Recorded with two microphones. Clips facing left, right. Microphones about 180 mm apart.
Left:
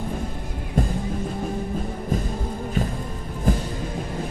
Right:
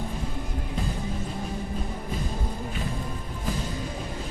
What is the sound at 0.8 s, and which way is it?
Music, 50° left (ahead or behind).